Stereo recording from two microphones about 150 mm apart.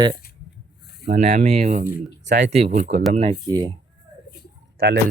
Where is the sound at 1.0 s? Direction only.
50° right (ahead or behind).